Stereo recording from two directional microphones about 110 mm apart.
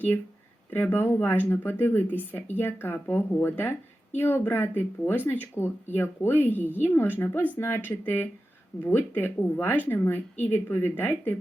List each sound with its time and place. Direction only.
0.7 s a woman's voice: 15° left (ahead or behind)